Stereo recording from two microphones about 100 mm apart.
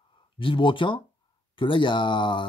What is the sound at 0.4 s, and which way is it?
Speech, 55° left (ahead or behind).